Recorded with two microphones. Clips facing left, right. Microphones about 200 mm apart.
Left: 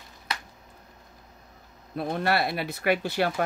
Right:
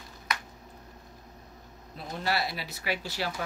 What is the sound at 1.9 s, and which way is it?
Speech, 55° left (ahead or behind).